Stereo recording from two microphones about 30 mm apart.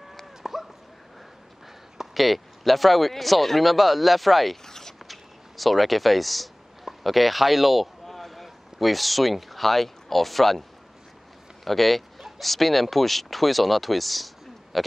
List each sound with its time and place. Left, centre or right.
0.4 s dog: centre
2.1 s speech: centre
4.6 s zipper: centre
5.0 s a sound: centre
11.6 s speech: centre